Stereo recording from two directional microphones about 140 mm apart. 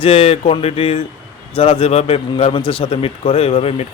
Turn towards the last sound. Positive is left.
turn(degrees=45)  # may be behind; listen again after turning